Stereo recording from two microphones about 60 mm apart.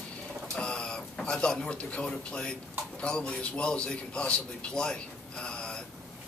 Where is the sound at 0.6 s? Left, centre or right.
Centre.